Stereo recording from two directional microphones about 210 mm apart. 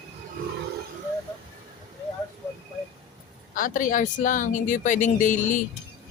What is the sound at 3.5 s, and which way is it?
Speech, 40° left (ahead or behind).